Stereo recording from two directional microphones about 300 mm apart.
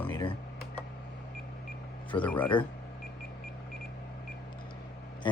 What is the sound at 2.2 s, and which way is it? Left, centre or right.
Speech, centre.